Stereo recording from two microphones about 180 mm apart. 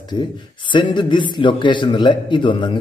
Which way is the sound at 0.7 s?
25° left (ahead or behind).